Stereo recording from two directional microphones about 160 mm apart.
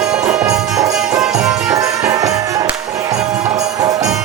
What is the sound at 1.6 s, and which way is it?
Music, 20° right (ahead or behind).